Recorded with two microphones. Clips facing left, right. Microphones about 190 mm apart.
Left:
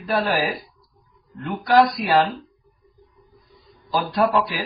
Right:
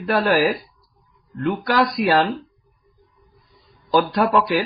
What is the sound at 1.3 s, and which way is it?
Speech, 90° right.